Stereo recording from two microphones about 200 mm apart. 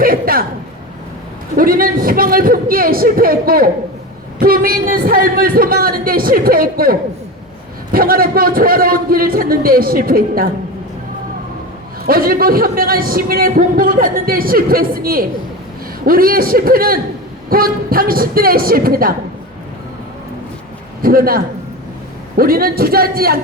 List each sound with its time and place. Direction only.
0.0 s a man's voice: 45° right (ahead or behind)
1.5 s a man's voice: 45° right (ahead or behind)
7.9 s a man's voice: 45° right (ahead or behind)
12.0 s a man's voice: 45° right (ahead or behind)
21.0 s a man's voice: 45° right (ahead or behind)